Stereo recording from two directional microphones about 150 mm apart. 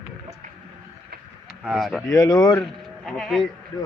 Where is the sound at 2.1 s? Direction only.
25° left (ahead or behind).